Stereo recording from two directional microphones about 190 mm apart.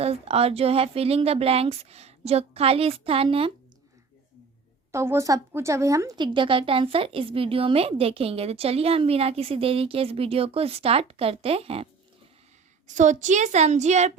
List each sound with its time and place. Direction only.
0.0 s speech: 30° right (ahead or behind)
4.9 s speech: 15° right (ahead or behind); by 11.9 s 30° right (ahead or behind)
12.9 s speech: 40° right (ahead or behind)